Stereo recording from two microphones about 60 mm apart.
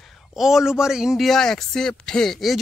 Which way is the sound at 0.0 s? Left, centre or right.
Centre.